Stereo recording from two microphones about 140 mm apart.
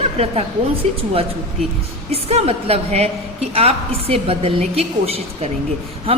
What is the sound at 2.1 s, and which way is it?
A woman's voice, 45° right (ahead or behind).